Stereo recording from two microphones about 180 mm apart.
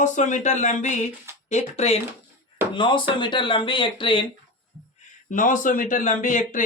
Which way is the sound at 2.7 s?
25° left (ahead or behind).